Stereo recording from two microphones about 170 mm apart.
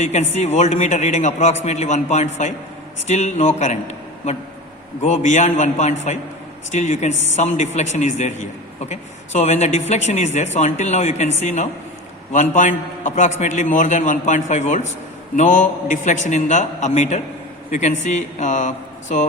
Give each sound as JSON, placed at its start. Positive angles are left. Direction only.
{"t": 0.0, "sound": "a man's voice", "side_deg": 40}